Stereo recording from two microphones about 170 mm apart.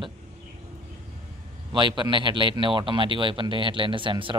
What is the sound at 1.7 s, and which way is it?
A man's voice, 30° right (ahead or behind).